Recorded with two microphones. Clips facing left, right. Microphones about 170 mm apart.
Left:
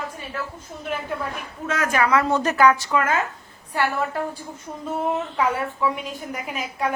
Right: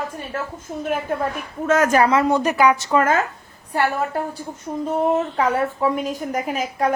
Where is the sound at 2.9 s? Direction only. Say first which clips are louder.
Right 4 dB; 40° right (ahead or behind).